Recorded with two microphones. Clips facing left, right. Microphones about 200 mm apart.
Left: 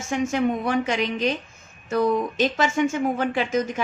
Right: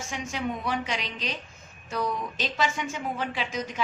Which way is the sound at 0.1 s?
50° left (ahead or behind).